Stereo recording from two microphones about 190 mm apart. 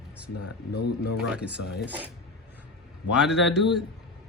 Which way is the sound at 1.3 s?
5° right (ahead or behind).